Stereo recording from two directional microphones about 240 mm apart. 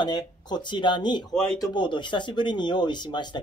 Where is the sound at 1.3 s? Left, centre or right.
Centre.